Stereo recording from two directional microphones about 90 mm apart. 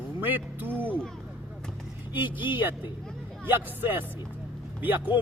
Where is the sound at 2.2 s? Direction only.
20° right (ahead or behind).